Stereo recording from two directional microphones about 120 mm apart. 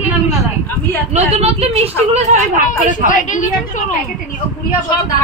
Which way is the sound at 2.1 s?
65° right (ahead or behind).